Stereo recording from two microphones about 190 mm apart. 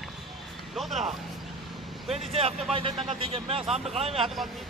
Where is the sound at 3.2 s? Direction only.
30° right (ahead or behind).